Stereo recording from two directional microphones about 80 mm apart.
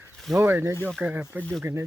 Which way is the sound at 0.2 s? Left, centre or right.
Centre.